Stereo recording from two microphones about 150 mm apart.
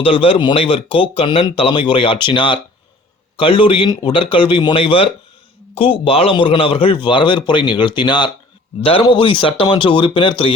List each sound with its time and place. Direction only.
0.0 s speech: 40° left (ahead or behind)